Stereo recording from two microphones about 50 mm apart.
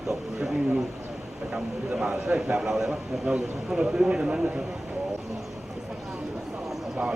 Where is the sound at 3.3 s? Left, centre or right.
Centre.